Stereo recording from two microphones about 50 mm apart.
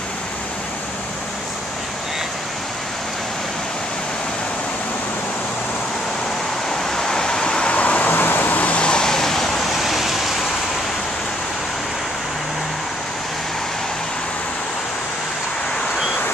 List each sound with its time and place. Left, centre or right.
6.8 s vehicle: centre